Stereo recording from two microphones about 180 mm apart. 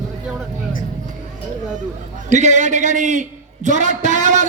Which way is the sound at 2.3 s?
40° right (ahead or behind).